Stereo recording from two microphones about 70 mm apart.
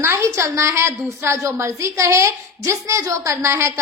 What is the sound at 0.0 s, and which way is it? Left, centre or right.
A woman's voice, right.